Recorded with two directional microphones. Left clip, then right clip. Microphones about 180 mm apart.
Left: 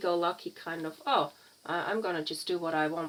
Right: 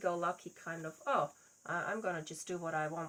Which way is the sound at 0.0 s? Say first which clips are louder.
Left 6 dB; 30° left (ahead or behind).